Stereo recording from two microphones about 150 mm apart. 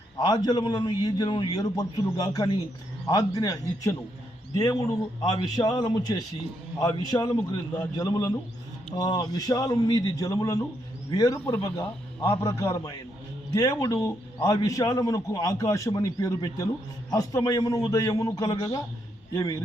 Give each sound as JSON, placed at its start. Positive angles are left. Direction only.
{"t": 0.2, "sound": "a man's voice", "side_deg": 25}